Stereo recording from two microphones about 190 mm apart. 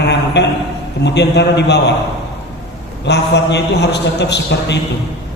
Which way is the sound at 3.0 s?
65° left (ahead or behind).